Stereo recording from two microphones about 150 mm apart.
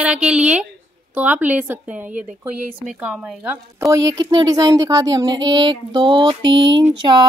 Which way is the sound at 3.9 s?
20° right (ahead or behind).